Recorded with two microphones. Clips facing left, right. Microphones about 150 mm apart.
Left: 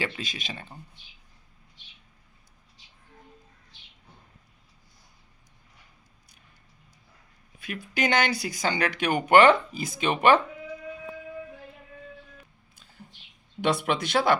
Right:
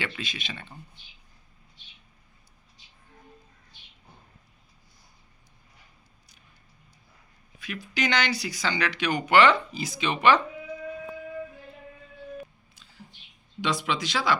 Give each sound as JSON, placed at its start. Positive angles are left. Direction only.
{"t": 0.0, "sound": "speech", "side_deg": 40}
{"t": 7.6, "sound": "speech", "side_deg": 50}
{"t": 12.7, "sound": "a sound", "side_deg": 50}
{"t": 13.6, "sound": "speech", "side_deg": 60}